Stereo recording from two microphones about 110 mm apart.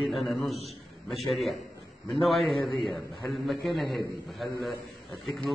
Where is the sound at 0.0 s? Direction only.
Centre (ahead or behind).